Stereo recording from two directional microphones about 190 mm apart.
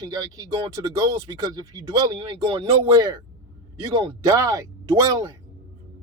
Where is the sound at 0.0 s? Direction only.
20° right (ahead or behind).